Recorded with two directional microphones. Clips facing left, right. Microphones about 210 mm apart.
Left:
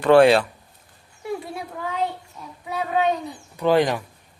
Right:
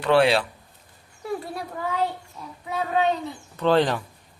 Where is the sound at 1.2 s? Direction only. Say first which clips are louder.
Even; centre (ahead or behind).